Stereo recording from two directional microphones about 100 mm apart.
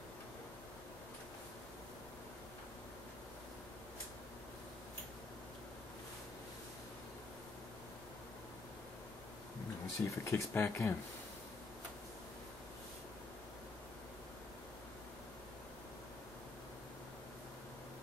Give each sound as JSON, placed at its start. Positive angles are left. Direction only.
{"t": 10.0, "sound": "speech", "side_deg": 25}